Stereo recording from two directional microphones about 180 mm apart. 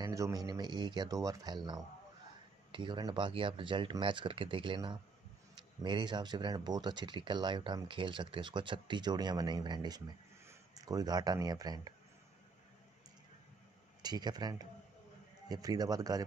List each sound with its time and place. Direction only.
0.0 s speech: 20° right (ahead or behind)
14.0 s speech: 20° right (ahead or behind)